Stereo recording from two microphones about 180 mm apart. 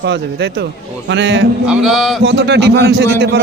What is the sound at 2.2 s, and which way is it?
A man's voice, 70° right (ahead or behind).